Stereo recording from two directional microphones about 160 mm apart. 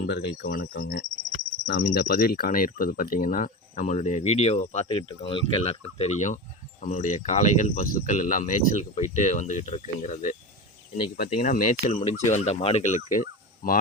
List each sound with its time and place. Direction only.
0.0 s speech: 90° left
1.6 s speech: 90° left; by 4.9 s 45° left (ahead or behind)
4.9 s speech: 30° left (ahead or behind); by 13.7 s 55° left (ahead or behind)